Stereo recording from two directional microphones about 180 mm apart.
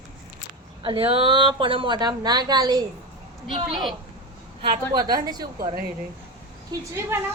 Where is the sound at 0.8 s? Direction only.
30° right (ahead or behind).